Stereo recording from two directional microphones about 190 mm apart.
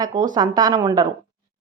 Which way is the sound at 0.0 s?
20° right (ahead or behind).